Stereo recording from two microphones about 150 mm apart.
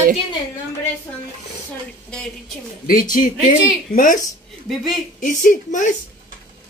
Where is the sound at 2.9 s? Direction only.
65° left (ahead or behind).